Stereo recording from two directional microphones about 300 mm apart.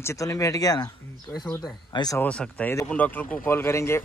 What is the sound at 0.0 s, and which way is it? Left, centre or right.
Speech, centre.